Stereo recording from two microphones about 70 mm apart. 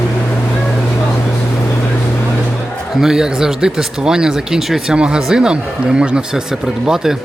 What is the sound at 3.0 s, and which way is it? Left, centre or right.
Speech, centre.